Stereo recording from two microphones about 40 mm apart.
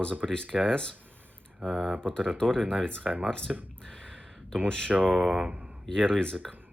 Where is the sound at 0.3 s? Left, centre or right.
Centre.